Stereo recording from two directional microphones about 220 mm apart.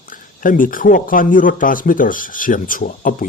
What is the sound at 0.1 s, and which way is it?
Speech, 40° left (ahead or behind).